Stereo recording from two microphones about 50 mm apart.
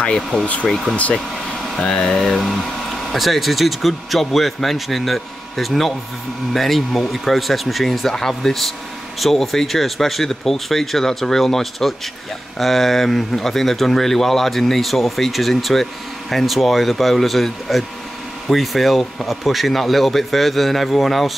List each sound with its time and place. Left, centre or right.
0.0 s speech: centre